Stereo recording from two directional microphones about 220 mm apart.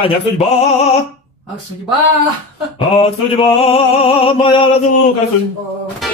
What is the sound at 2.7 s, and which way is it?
Opera, 25° left (ahead or behind).